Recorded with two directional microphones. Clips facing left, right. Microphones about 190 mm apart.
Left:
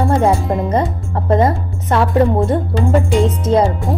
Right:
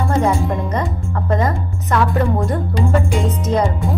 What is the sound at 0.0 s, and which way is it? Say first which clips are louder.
A woman's voice: left 3 dB; 30° left (ahead or behind).